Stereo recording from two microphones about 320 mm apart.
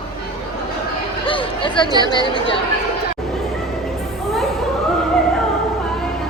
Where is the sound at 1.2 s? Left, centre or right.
Centre.